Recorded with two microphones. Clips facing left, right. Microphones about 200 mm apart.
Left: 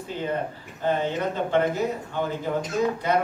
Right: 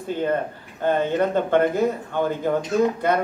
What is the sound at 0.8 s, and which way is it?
A man's voice, 55° right (ahead or behind).